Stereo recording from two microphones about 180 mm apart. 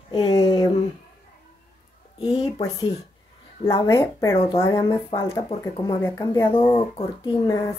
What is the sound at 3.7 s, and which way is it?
Speech, 15° left (ahead or behind).